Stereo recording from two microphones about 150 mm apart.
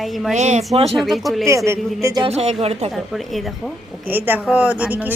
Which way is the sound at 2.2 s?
45° right (ahead or behind).